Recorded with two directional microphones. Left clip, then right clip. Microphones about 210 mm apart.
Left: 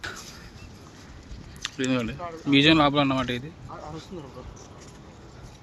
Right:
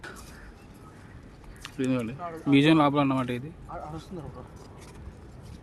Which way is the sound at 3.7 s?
60° right (ahead or behind).